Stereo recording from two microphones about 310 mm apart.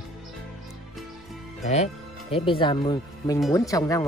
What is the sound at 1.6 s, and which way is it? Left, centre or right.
Speech, left.